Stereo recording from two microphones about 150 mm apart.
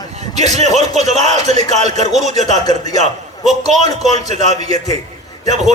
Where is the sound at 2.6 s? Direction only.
25° left (ahead or behind).